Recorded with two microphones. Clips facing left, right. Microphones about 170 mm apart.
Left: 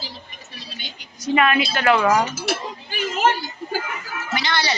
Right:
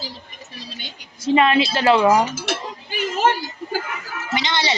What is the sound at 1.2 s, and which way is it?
A woman's voice, 25° right (ahead or behind).